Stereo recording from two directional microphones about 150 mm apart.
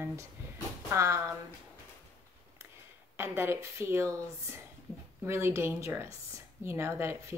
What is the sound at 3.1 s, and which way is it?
A woman's voice, 15° right (ahead or behind).